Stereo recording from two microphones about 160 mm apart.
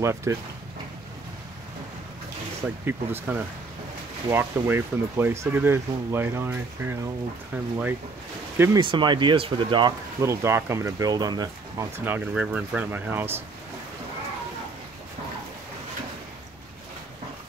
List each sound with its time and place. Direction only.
0.0 s speech: 15° right (ahead or behind)
2.8 s speech: 15° right (ahead or behind)
8.7 s speech: 30° right (ahead or behind)
10.2 s speech: 15° right (ahead or behind)
12.0 s speech: 10° right (ahead or behind)